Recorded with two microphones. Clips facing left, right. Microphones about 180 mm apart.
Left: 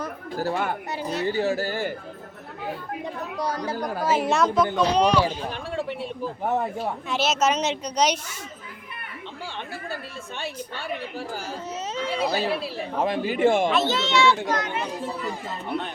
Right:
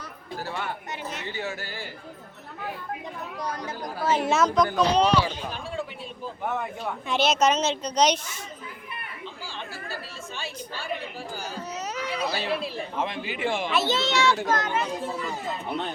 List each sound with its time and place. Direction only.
0.0 s speech: 45° left (ahead or behind)
3.5 s speech: 35° left (ahead or behind)
4.0 s a woman's voice: 5° left (ahead or behind)
5.5 s speech: 65° left (ahead or behind)
6.4 s speech: 40° left (ahead or behind)
7.1 s a woman's voice: 5° left (ahead or behind)
9.9 s a woman's voice: 60° left (ahead or behind)
11.5 s a child's voice: 30° left (ahead or behind)
13.0 s speech: 40° left (ahead or behind)
13.7 s a woman's voice: 5° right (ahead or behind)
14.0 s a child's voice: 40° right (ahead or behind)